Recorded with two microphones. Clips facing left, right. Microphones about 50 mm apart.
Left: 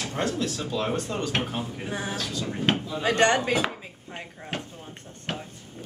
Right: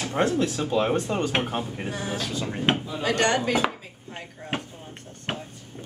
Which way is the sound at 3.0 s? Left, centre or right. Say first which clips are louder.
Left 3 dB; left.